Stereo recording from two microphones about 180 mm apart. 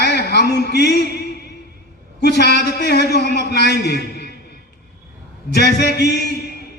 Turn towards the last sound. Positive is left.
turn(degrees=65)  # may be behind; listen again after turning